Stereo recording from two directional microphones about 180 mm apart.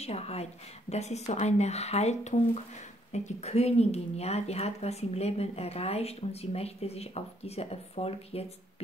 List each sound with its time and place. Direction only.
0.0 s speech: 35° left (ahead or behind)